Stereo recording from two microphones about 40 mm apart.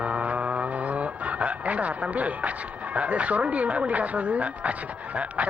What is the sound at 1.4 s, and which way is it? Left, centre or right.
Speech, right.